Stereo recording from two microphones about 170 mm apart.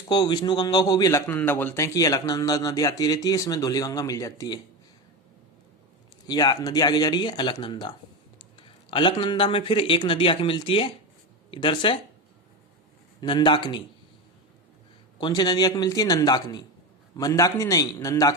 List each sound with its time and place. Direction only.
0.1 s a man's voice: 25° left (ahead or behind)
6.2 s a man's voice: 25° left (ahead or behind)
13.2 s a man's voice: 30° left (ahead or behind)
15.2 s a man's voice: 25° left (ahead or behind)